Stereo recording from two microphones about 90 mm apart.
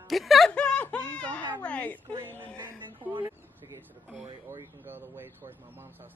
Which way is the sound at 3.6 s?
45° right (ahead or behind).